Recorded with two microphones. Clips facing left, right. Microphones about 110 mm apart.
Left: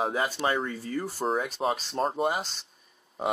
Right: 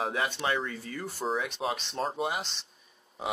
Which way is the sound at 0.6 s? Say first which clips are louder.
Left 5 dB; 35° left (ahead or behind).